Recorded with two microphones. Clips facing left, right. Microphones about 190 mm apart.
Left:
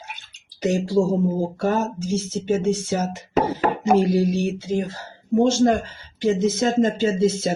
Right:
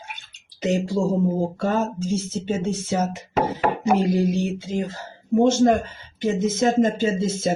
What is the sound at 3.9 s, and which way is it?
Speech, 20° right (ahead or behind).